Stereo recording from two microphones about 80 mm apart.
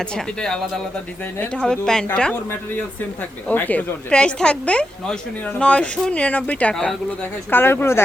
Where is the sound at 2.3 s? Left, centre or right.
Left.